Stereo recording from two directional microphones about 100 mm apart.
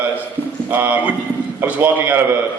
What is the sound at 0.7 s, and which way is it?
A man's voice, 15° right (ahead or behind).